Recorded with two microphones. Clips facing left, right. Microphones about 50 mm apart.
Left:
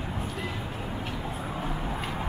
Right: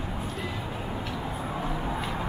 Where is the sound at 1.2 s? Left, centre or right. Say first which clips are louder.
Right 1 dB; centre.